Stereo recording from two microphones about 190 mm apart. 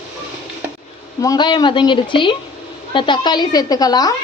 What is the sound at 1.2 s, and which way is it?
Speech, 20° left (ahead or behind).